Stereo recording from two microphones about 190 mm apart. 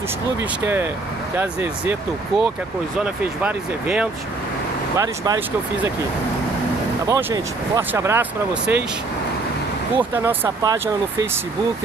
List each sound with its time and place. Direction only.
0.4 s speech: 10° right (ahead or behind)
4.9 s speech: 20° right (ahead or behind)
7.1 s speech: 15° right (ahead or behind)
10.1 s speech: 10° right (ahead or behind)